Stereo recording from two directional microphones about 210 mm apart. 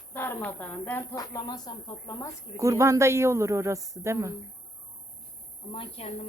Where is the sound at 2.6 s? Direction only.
15° right (ahead or behind).